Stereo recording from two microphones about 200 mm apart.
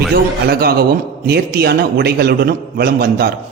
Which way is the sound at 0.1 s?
50° right (ahead or behind).